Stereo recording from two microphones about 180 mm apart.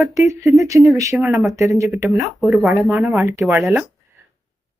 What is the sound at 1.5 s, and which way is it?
Speech, 15° right (ahead or behind).